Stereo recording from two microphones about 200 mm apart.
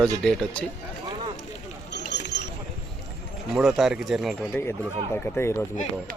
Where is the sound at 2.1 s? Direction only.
55° left (ahead or behind).